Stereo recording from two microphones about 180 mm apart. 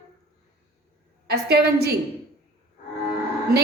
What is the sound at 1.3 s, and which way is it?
Speech, 60° right (ahead or behind).